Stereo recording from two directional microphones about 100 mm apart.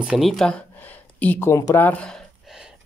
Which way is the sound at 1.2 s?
15° left (ahead or behind).